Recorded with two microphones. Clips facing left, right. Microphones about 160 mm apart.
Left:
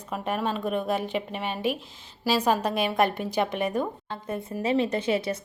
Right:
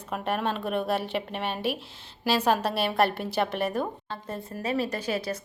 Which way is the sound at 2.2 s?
10° left (ahead or behind).